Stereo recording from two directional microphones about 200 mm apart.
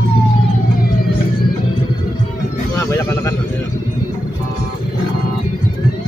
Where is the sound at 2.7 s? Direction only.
15° left (ahead or behind).